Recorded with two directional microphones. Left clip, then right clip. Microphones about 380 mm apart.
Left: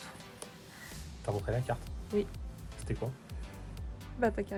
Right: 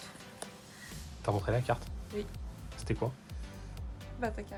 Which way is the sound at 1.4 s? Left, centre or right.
Centre.